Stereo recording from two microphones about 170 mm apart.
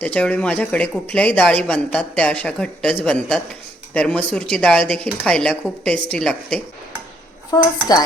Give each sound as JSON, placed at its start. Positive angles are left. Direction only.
{"t": 0.0, "sound": "a woman's voice", "side_deg": 10}
{"t": 7.5, "sound": "speech", "side_deg": 25}